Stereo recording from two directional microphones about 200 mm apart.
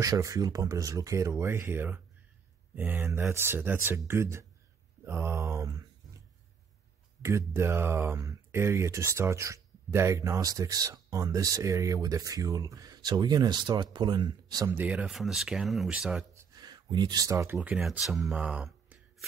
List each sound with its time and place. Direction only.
0.0 s speech: 15° right (ahead or behind)
7.2 s speech: 15° right (ahead or behind)
16.3 s a sound: 20° right (ahead or behind)
17.6 s speech: centre (ahead or behind)